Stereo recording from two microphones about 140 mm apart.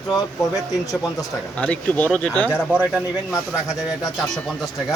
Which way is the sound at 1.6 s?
10° left (ahead or behind).